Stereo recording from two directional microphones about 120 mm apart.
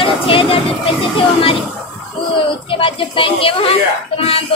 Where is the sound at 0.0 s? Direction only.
50° left (ahead or behind).